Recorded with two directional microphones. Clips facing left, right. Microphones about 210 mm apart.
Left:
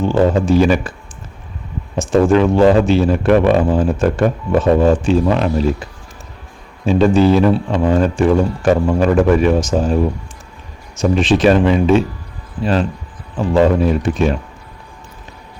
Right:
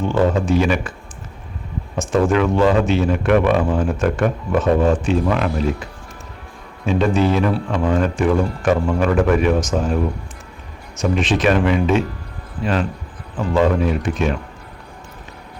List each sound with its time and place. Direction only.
0.0 s speech: 30° left (ahead or behind)
2.0 s speech: 30° left (ahead or behind)
6.8 s speech: 30° left (ahead or behind)
13.5 s speech: 35° left (ahead or behind)